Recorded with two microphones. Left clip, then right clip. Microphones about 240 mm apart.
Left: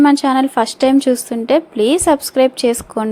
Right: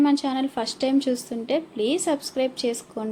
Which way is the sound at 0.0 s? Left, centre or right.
Left.